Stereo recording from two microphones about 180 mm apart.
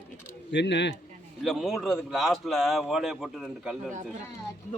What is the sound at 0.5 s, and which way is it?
Speech, 75° left (ahead or behind).